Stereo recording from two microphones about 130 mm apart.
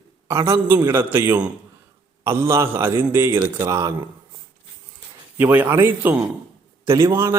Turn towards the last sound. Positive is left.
turn(degrees=-20)  # may be behind; listen again after turning